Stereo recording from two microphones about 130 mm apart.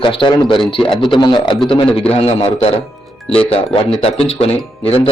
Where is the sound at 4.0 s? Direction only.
45° left (ahead or behind).